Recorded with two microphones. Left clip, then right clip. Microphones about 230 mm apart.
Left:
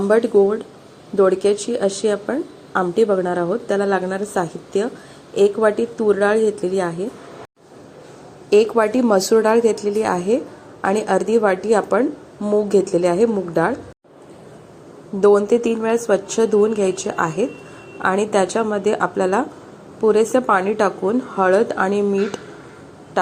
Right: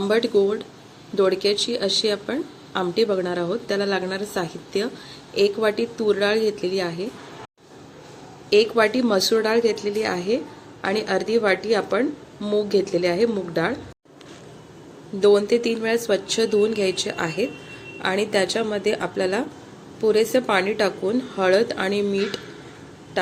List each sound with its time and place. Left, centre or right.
0.1 s a woman's voice: centre
8.4 s a woman's voice: centre
15.4 s a woman's voice: centre